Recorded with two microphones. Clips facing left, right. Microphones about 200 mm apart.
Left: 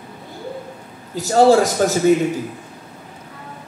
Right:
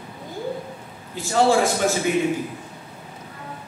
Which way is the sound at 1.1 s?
40° left (ahead or behind).